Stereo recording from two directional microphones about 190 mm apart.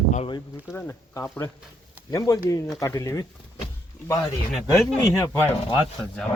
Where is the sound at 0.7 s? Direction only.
10° left (ahead or behind).